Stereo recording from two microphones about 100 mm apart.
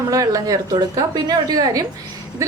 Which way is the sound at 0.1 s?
35° right (ahead or behind).